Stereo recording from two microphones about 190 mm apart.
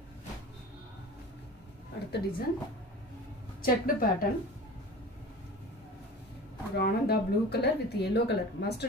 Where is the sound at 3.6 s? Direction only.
50° left (ahead or behind).